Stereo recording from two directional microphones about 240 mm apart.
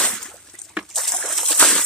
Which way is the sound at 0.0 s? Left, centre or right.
Centre.